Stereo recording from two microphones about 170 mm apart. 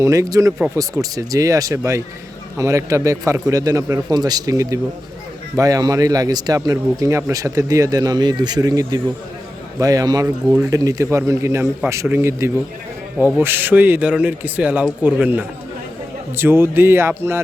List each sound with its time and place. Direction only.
0.0 s a man's voice: 20° right (ahead or behind)